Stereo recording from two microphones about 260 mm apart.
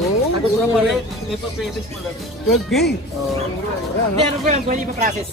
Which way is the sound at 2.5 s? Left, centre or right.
Centre.